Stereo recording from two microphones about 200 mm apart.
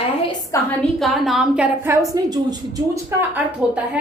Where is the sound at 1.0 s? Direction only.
Centre (ahead or behind).